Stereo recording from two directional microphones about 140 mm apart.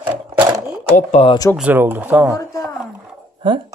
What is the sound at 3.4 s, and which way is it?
Speech, 35° right (ahead or behind).